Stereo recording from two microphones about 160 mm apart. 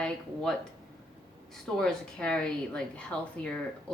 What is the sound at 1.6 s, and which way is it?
A woman's voice, 5° left (ahead or behind).